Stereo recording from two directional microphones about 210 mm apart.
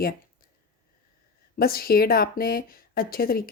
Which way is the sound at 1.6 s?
45° left (ahead or behind).